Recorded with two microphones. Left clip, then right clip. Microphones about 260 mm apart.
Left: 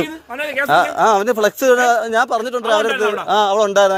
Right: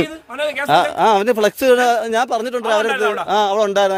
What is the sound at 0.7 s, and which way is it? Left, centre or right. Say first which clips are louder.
A man's voice: even; right.